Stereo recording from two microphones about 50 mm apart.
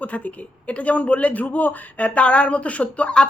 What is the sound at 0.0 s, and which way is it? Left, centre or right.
A man's voice, left.